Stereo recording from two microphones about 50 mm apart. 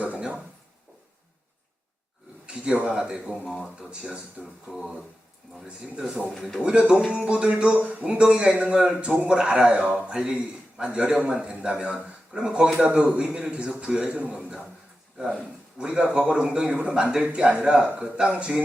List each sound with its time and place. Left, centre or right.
2.5 s a man's voice: centre
4.7 s a sound: centre
5.5 s a man's voice: centre
6.6 s a man's voice: centre
15.8 s a man's voice: centre